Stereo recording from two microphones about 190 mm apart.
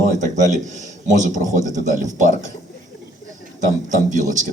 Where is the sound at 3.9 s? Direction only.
40° right (ahead or behind).